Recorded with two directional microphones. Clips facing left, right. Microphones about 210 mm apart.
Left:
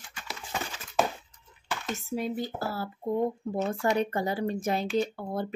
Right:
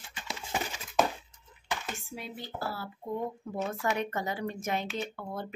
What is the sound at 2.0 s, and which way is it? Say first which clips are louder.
Speech: left 11 dB; 40° left (ahead or behind).